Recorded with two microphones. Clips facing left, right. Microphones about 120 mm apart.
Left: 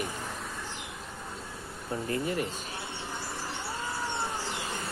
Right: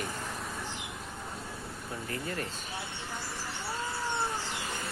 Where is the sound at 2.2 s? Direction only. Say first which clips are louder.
Left 3 dB; 15° left (ahead or behind).